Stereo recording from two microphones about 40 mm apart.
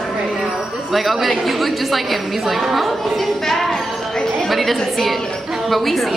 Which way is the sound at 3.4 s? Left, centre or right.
Centre.